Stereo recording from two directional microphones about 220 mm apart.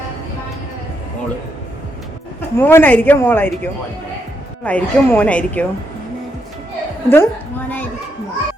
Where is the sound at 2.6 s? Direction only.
10° left (ahead or behind).